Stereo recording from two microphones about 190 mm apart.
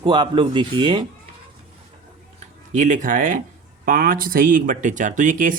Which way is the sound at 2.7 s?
40° right (ahead or behind).